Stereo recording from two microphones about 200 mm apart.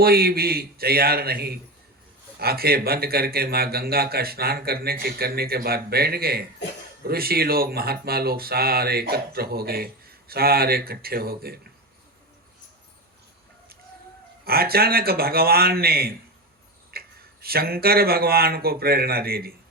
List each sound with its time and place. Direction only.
0.0 s speech: 50° right (ahead or behind)
14.4 s speech: 50° right (ahead or behind)
16.9 s a sound: 50° right (ahead or behind)
17.4 s speech: 50° right (ahead or behind)